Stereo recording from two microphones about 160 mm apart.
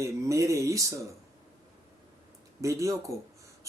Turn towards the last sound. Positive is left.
turn(degrees=-20)  # may be behind; listen again after turning